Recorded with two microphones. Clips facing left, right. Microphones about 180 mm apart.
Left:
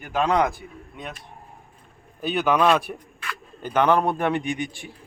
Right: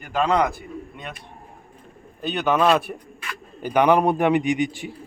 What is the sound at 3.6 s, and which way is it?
A man's voice, 15° right (ahead or behind).